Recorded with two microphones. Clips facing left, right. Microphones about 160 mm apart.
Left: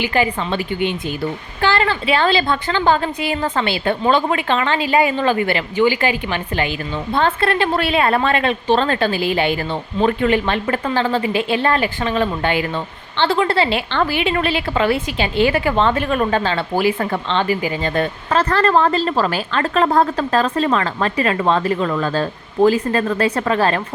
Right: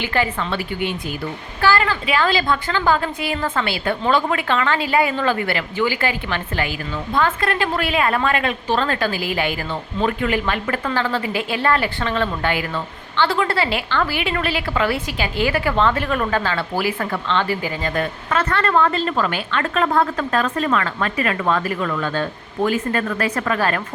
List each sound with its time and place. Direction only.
0.0 s a woman's voice: 15° left (ahead or behind)
17.9 s speech: 30° left (ahead or behind)